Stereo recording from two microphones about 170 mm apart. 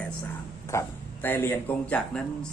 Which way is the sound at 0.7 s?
15° left (ahead or behind).